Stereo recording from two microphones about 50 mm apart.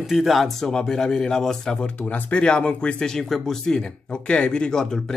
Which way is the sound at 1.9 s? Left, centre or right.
Left.